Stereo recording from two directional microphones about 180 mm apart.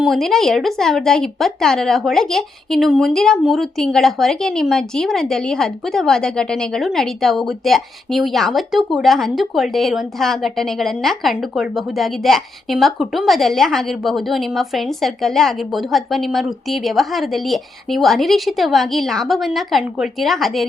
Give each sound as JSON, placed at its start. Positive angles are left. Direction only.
{"t": 0.0, "sound": "speech", "side_deg": 0}